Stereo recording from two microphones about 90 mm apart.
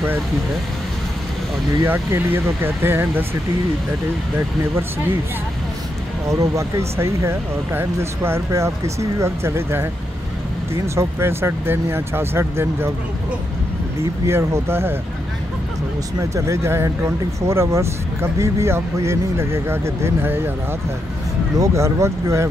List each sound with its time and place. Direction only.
1.9 s speech: 25° right (ahead or behind)
6.2 s speech: 35° right (ahead or behind)
14.2 s speech: 30° right (ahead or behind)
16.2 s speech: 35° right (ahead or behind)
21.5 s speech: 35° right (ahead or behind)